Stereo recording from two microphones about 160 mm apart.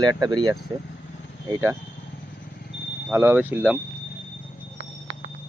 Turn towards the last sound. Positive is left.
turn(degrees=-10)  # may be behind; listen again after turning